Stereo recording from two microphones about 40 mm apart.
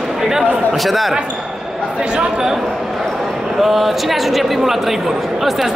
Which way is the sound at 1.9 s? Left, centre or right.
Right.